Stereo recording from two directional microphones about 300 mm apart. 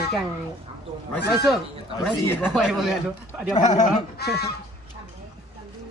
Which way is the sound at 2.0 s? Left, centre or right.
Centre.